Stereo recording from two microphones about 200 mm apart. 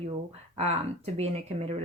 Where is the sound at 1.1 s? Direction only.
35° right (ahead or behind).